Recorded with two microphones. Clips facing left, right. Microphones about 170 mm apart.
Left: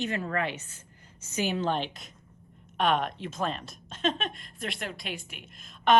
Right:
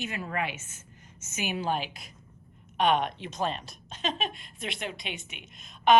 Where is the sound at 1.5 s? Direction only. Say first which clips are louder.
Left 1 dB; 10° right (ahead or behind).